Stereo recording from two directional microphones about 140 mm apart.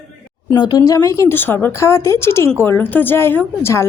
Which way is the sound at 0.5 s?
30° left (ahead or behind).